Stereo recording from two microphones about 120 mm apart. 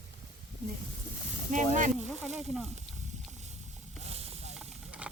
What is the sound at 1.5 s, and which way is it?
Speech, 90° right.